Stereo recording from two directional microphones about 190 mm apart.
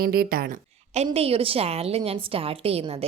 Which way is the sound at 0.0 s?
50° right (ahead or behind).